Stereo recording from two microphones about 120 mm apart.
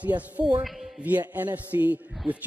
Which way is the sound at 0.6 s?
Centre (ahead or behind).